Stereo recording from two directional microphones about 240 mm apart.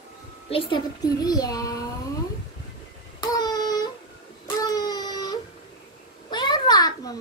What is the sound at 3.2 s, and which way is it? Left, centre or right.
Child singing, centre.